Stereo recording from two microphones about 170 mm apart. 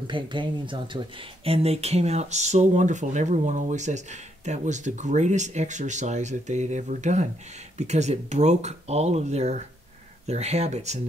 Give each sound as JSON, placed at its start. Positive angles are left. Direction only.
{"t": 0.0, "sound": "speech", "side_deg": -30}